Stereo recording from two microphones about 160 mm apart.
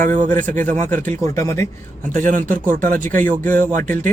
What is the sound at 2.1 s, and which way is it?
A man's voice, 55° right (ahead or behind).